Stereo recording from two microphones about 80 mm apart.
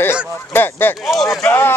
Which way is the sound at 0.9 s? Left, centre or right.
Centre.